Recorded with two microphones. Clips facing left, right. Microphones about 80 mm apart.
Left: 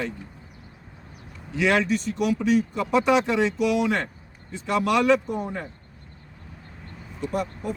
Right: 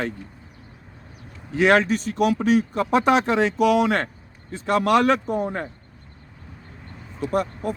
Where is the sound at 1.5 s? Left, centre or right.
Right.